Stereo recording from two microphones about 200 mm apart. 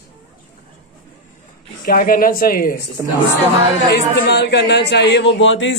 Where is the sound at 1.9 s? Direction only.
45° left (ahead or behind).